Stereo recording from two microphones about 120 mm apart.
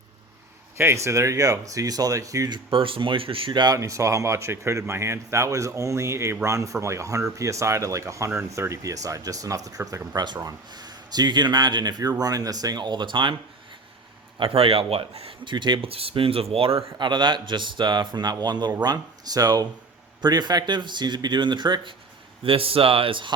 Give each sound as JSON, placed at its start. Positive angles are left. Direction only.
{"t": 0.8, "sound": "speech", "side_deg": -25}
{"t": 2.6, "sound": "speech", "side_deg": -45}
{"t": 3.8, "sound": "speech", "side_deg": -25}
{"t": 14.3, "sound": "speech", "side_deg": -50}
{"t": 22.4, "sound": "speech", "side_deg": -50}